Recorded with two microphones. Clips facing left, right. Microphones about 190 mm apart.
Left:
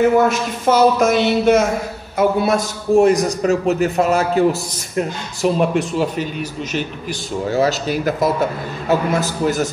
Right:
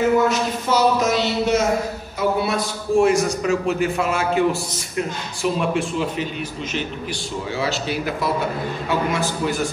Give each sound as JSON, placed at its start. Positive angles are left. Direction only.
{"t": 0.3, "sound": "a man's voice", "side_deg": 50}